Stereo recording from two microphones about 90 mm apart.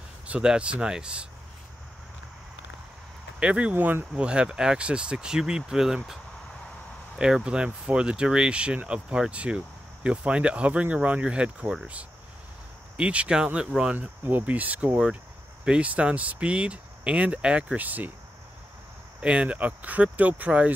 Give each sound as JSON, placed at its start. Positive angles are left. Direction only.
{"t": 0.3, "sound": "speech", "side_deg": -10}
{"t": 3.3, "sound": "speech", "side_deg": -15}
{"t": 4.1, "sound": "speech", "side_deg": -10}
{"t": 7.2, "sound": "speech", "side_deg": -10}
{"t": 12.9, "sound": "speech", "side_deg": -15}
{"t": 13.9, "sound": "speech", "side_deg": -20}
{"t": 19.2, "sound": "speech", "side_deg": -15}